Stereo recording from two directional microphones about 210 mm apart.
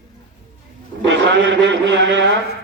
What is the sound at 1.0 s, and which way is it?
A man's voice, 60° right (ahead or behind).